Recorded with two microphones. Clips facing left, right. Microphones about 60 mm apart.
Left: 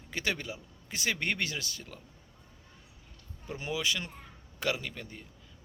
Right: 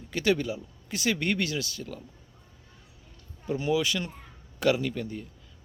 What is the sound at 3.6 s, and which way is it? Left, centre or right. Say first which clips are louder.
Speech: right 6 dB; centre.